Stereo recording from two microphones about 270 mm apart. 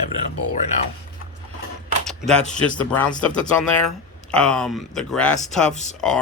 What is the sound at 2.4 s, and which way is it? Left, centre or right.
Speech, left.